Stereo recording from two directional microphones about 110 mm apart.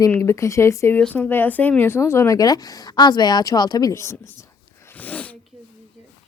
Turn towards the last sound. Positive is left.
turn(degrees=15)  # may be behind; listen again after turning